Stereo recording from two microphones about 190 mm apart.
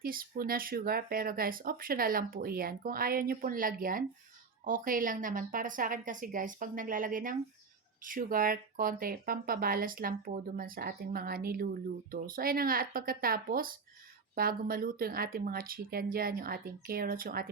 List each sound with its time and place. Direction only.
0.0 s speech: 50° right (ahead or behind)